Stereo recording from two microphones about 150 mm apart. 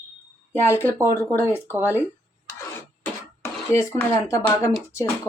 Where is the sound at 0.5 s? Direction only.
15° left (ahead or behind).